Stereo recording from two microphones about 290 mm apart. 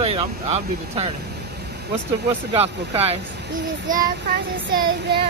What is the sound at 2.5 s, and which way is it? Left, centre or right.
Speech, right.